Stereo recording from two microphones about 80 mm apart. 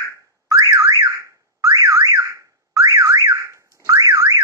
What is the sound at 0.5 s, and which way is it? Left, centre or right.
Car alarm, right.